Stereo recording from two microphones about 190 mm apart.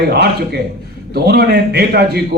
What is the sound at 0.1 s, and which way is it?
A man's voice, 60° right (ahead or behind).